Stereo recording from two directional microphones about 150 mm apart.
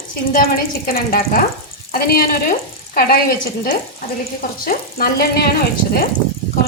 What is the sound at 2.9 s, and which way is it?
Speech, 90° left.